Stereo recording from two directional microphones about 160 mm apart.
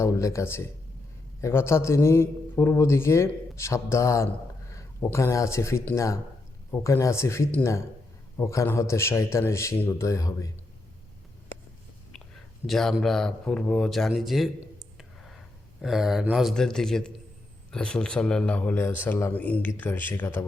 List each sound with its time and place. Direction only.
0.0 s a man's voice: 20° left (ahead or behind)
12.6 s a man's voice: centre (ahead or behind)